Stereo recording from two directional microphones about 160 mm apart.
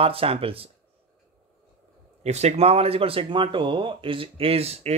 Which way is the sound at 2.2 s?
45° right (ahead or behind).